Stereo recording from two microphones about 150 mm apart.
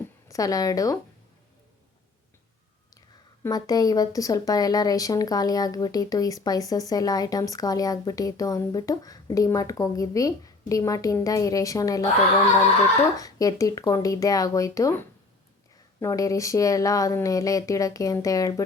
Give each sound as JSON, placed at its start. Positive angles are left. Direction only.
{"t": 0.0, "sound": "a sound", "side_deg": 20}
{"t": 3.4, "sound": "speech", "side_deg": 25}
{"t": 13.1, "sound": "speech", "side_deg": 25}
{"t": 16.0, "sound": "speech", "side_deg": 20}